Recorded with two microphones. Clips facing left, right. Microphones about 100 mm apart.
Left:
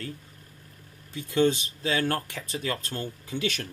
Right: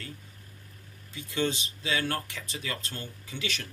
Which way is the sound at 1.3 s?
45° left (ahead or behind).